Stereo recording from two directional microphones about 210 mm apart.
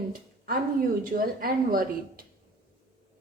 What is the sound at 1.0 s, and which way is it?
A woman's voice, 45° right (ahead or behind).